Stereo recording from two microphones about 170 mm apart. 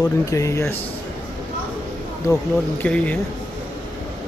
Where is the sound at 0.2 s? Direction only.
20° left (ahead or behind).